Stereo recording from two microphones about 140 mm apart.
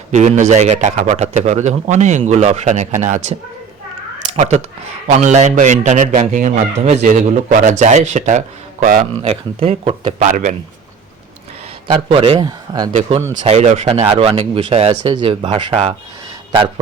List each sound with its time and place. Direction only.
0.1 s speech: 60° right (ahead or behind)
4.4 s speech: 55° right (ahead or behind); by 9.0 s 70° right (ahead or behind)
9.2 s speech: 45° right (ahead or behind)
11.9 s speech: 40° right (ahead or behind)
12.4 s speech: 30° right (ahead or behind)
13.0 s speech: 50° right (ahead or behind)
15.1 s speech: 35° right (ahead or behind)